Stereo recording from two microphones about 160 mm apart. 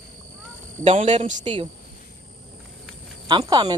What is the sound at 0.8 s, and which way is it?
Speech, 40° right (ahead or behind).